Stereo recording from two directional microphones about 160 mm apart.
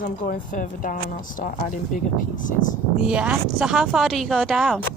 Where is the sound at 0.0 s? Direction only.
60° left (ahead or behind).